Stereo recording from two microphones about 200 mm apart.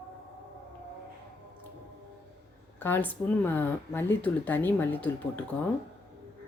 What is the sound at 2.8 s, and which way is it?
A woman's voice, 10° left (ahead or behind).